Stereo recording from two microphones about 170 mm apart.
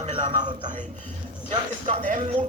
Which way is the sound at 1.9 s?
50° right (ahead or behind).